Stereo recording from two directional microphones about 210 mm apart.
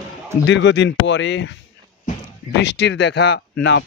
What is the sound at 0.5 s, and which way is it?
Speech, 55° left (ahead or behind).